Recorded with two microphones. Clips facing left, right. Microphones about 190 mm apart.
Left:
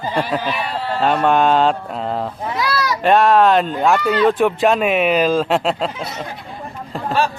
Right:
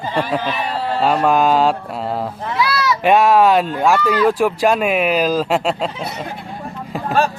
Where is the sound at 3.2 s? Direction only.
5° right (ahead or behind).